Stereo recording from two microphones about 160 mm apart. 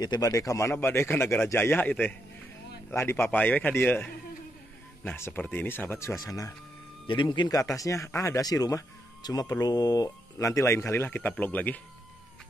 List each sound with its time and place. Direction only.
0.0 s speech: 25° left (ahead or behind)